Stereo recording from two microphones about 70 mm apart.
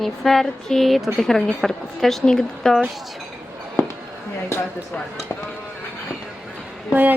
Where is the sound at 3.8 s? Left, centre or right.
Left.